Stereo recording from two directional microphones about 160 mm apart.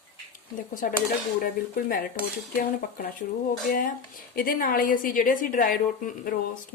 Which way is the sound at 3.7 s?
55° left (ahead or behind).